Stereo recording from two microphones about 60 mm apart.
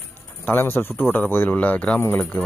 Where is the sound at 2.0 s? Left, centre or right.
Left.